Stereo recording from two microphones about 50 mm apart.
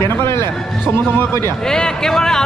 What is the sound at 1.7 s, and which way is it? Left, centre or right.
Speech, centre.